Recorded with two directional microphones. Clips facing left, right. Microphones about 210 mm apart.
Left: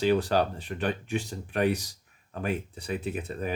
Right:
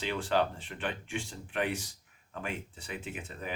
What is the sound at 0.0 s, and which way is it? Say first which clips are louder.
Speech: left 6 dB; 40° left (ahead or behind).